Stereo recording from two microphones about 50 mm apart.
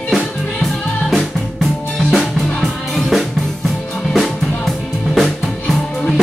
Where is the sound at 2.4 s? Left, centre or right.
Centre.